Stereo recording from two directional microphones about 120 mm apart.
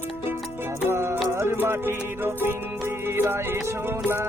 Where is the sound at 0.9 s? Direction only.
20° right (ahead or behind).